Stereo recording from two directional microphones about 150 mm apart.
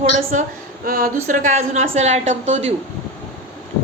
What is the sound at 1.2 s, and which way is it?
A woman's voice, 60° right (ahead or behind).